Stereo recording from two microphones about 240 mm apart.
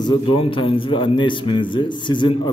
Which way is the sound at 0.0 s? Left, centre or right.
Left.